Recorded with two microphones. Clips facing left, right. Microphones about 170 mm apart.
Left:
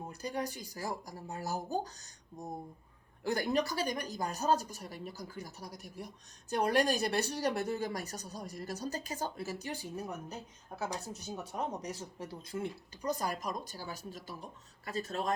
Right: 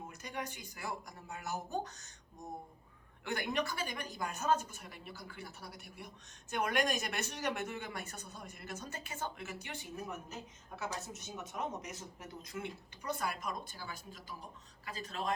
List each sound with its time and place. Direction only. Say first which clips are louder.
0.0 s speech: left 6 dB; 35° left (ahead or behind)
3.2 s speech: left 5 dB; 35° left (ahead or behind)